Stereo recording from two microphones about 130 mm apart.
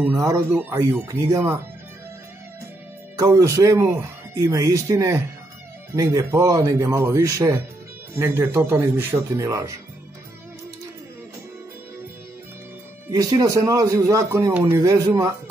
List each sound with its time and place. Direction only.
0.2 s speech: 20° right (ahead or behind)
3.2 s speech: 25° right (ahead or behind)
13.1 s speech: 25° right (ahead or behind)